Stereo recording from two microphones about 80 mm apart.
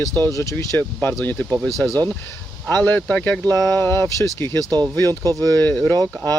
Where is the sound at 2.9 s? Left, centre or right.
Centre.